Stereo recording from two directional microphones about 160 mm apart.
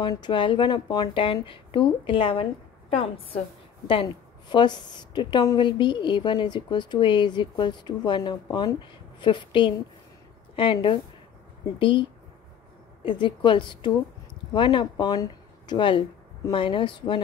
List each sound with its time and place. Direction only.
0.0 s a woman's voice: 30° left (ahead or behind)